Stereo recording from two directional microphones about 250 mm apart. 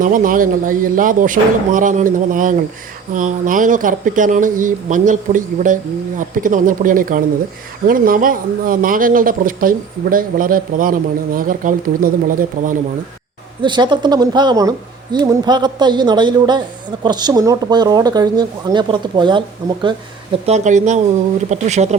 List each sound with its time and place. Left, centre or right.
0.0 s speech: right
13.6 s speech: centre